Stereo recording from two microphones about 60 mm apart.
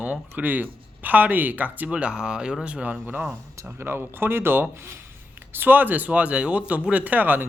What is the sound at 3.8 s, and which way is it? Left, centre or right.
Speech, right.